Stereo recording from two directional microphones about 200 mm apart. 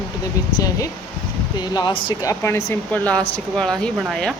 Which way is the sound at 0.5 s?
15° left (ahead or behind).